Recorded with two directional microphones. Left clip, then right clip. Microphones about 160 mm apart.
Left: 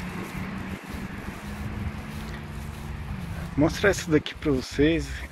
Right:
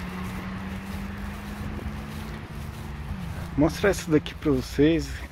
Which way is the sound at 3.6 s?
10° right (ahead or behind).